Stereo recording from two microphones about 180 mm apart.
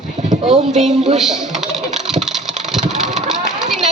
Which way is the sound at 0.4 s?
35° right (ahead or behind).